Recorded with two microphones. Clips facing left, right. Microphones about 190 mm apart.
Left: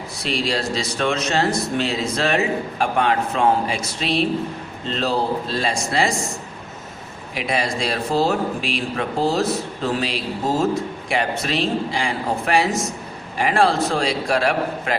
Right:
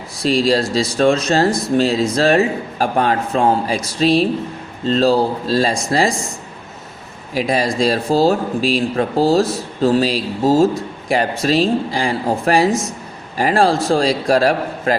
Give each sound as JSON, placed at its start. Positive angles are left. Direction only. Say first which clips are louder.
{"t": 0.3, "sound": "speech", "louder": "right 8 dB", "side_deg": -35}
{"t": 7.3, "sound": "speech", "louder": "right 6 dB", "side_deg": -35}